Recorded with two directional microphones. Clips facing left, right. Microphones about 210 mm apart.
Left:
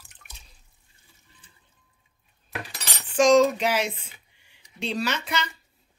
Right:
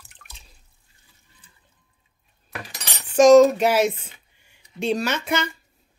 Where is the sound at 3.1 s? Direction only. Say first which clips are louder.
Right 6 dB; 45° right (ahead or behind).